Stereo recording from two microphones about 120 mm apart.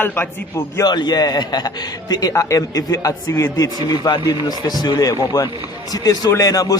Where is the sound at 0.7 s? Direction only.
35° left (ahead or behind).